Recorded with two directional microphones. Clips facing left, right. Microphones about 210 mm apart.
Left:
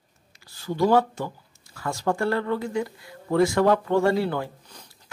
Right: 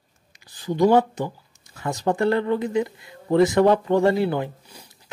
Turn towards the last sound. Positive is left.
turn(degrees=-15)  # may be behind; listen again after turning